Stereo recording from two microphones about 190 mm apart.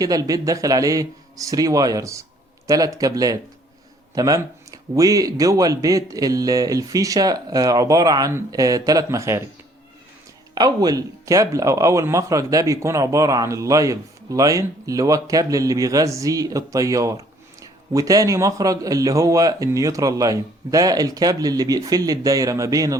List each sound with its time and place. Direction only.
0.0 s a man's voice: 20° right (ahead or behind)
10.5 s speech: 20° right (ahead or behind)